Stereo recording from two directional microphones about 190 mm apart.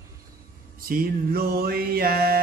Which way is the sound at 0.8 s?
50° right (ahead or behind).